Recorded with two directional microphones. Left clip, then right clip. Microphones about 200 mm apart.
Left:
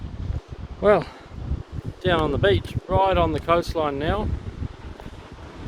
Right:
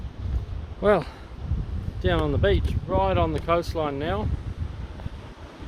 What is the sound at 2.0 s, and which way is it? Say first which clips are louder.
Speech: left 3 dB; 25° left (ahead or behind).